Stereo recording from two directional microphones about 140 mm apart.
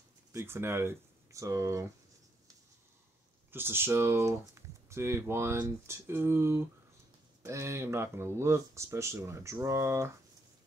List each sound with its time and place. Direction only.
0.3 s speech: 20° right (ahead or behind)
3.5 s speech: 15° right (ahead or behind)